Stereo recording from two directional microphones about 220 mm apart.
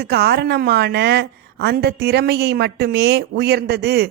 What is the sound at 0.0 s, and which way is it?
A woman's voice, 45° right (ahead or behind).